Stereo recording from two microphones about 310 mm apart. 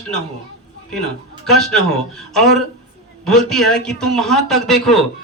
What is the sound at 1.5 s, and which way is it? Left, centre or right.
A man's voice, centre.